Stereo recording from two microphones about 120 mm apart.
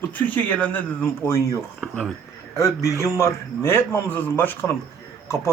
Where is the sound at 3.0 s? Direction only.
25° left (ahead or behind).